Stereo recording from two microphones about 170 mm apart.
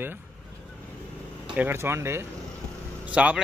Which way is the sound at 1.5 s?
15° right (ahead or behind).